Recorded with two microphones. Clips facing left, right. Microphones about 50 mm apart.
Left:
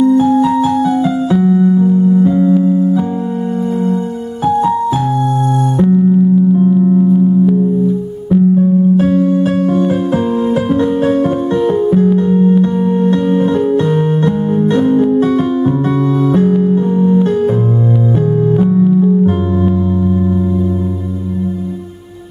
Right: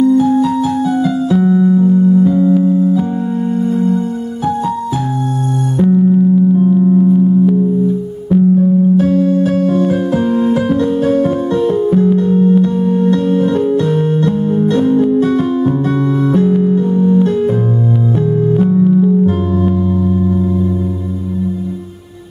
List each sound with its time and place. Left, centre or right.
0.0 s music: left
1.4 s music: centre
2.2 s music: left
2.6 s music: centre
6.6 s music: centre
8.5 s music: left
16.9 s music: left
18.5 s music: centre